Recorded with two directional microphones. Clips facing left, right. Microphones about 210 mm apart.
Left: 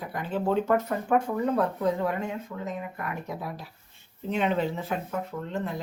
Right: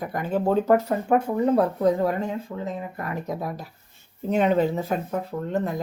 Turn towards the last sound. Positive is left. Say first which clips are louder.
# right 6 dB
turn(degrees=-40)  # may be behind; listen again after turning